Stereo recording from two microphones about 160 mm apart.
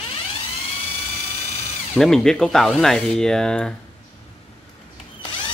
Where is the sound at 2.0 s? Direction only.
5° left (ahead or behind).